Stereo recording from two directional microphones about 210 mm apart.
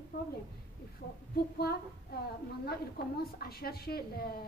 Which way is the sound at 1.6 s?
50° left (ahead or behind).